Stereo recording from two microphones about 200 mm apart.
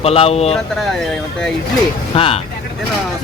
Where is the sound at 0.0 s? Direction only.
30° left (ahead or behind).